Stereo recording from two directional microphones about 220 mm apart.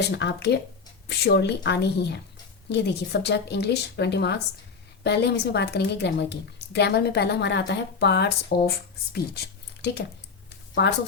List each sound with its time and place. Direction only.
0.1 s speech: 50° left (ahead or behind)
9.8 s speech: 50° left (ahead or behind)